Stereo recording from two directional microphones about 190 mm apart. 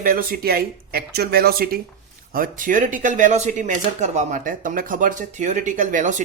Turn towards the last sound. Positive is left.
turn(degrees=-45)  # may be behind; listen again after turning